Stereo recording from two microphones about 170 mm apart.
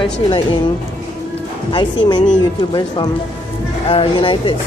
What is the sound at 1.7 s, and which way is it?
Speech, 25° left (ahead or behind).